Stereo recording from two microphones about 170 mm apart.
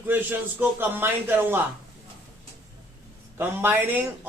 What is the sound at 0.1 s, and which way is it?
A man's voice, 10° right (ahead or behind).